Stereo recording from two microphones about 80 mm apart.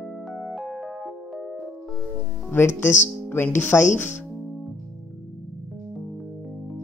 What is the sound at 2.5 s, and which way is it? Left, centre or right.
Speech, left.